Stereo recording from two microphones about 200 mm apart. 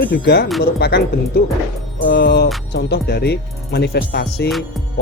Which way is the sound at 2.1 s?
60° left (ahead or behind).